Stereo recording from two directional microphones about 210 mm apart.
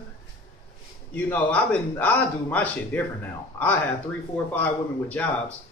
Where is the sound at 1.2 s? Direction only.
5° left (ahead or behind).